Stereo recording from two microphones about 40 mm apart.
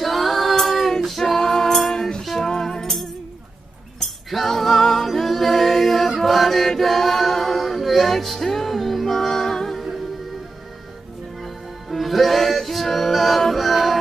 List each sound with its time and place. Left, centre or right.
0.0 s female singing: centre
1.0 s music: centre
4.3 s a capella: centre
6.1 s chant: centre
11.4 s music: centre